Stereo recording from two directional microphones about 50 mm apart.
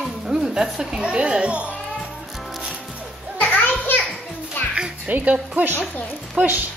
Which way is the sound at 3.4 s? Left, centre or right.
Left.